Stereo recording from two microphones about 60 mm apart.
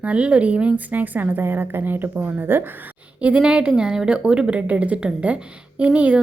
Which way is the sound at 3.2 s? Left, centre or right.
Centre.